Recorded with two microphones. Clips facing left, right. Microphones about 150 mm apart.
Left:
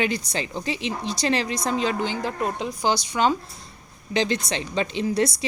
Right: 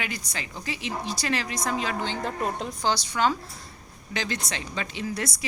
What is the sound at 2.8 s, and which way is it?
A woman's voice, 15° left (ahead or behind).